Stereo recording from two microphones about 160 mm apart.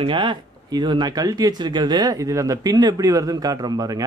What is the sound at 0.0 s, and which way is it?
A man's voice, 30° right (ahead or behind).